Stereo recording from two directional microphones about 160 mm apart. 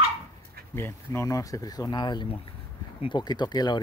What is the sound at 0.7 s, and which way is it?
Speech, 15° left (ahead or behind).